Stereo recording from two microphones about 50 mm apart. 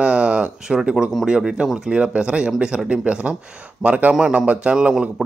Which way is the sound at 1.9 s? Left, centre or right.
Right.